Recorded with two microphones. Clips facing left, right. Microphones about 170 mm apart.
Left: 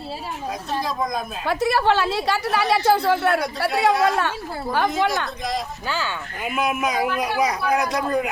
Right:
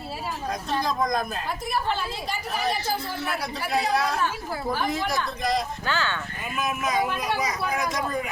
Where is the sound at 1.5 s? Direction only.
80° left.